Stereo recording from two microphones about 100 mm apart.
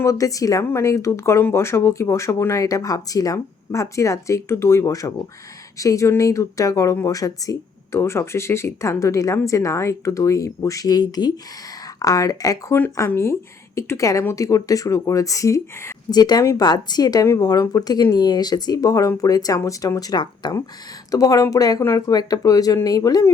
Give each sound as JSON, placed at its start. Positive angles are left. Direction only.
{"t": 0.0, "sound": "speech", "side_deg": 35}
{"t": 13.1, "sound": "speech", "side_deg": 25}
{"t": 16.0, "sound": "speech", "side_deg": 40}